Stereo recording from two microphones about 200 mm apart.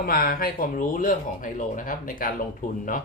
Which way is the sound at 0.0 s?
45° left (ahead or behind).